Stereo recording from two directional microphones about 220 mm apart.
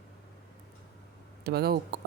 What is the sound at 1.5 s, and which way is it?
Speech, 45° right (ahead or behind).